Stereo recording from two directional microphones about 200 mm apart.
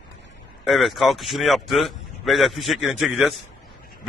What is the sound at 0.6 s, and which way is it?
Speech, centre (ahead or behind).